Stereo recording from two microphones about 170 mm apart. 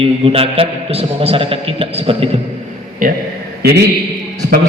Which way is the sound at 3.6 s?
65° right (ahead or behind).